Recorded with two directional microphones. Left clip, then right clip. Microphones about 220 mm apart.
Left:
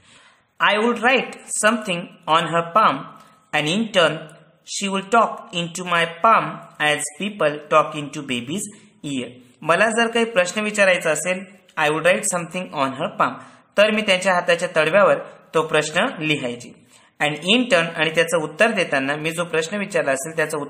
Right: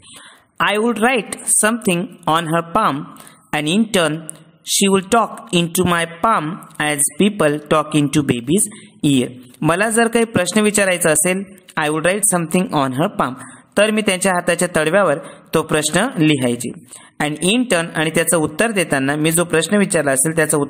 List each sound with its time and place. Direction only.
0.6 s speech: 40° right (ahead or behind)